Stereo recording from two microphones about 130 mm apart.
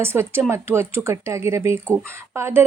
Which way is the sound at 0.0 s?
20° right (ahead or behind).